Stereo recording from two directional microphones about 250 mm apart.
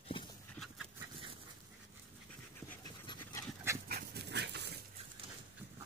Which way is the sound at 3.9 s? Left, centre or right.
Right.